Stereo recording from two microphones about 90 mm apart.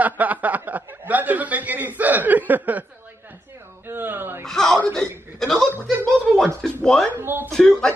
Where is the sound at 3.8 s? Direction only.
25° right (ahead or behind).